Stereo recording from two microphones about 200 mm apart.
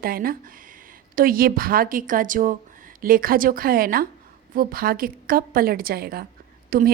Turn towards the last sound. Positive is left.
turn(degrees=-45)  # may be behind; listen again after turning